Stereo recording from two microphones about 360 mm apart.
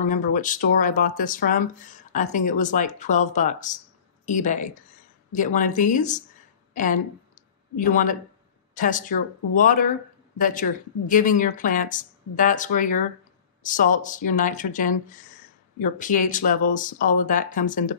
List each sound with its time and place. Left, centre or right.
0.0 s speech: left
6.7 s a sound: left
7.7 s speech: left